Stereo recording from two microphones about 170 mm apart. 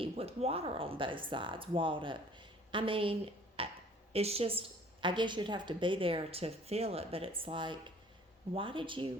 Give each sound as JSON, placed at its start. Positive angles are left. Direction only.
{"t": 0.0, "sound": "a woman's voice", "side_deg": -35}
{"t": 3.6, "sound": "a sound", "side_deg": -35}
{"t": 4.1, "sound": "a woman's voice", "side_deg": -35}